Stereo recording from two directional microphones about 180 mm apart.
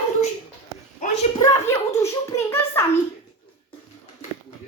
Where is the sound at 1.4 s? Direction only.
15° left (ahead or behind).